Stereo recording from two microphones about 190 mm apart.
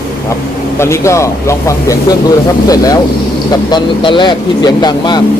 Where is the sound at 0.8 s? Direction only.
15° left (ahead or behind).